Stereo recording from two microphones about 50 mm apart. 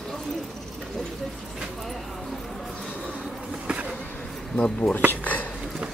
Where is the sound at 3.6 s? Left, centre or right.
Right.